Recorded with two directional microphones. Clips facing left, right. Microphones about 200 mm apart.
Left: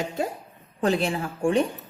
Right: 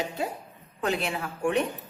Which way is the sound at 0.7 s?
35° left (ahead or behind).